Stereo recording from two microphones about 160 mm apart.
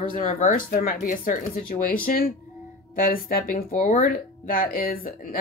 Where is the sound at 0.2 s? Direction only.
50° left (ahead or behind).